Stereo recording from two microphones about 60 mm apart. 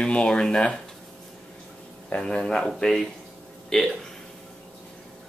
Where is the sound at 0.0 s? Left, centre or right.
Centre.